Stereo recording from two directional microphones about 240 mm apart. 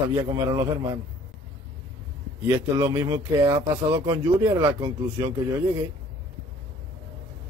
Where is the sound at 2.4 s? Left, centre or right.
Centre.